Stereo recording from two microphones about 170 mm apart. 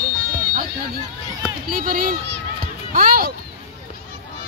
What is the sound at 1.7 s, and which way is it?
Speech, 55° right (ahead or behind).